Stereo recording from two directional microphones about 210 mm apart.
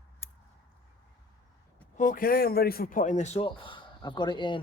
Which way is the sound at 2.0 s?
40° left (ahead or behind).